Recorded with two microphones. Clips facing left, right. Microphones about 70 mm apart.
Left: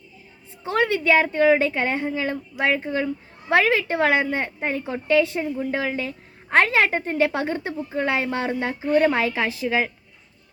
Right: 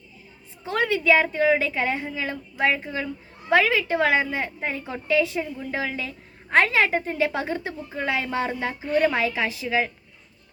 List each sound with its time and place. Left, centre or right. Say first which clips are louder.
0.6 s a woman's voice: left 2 dB; left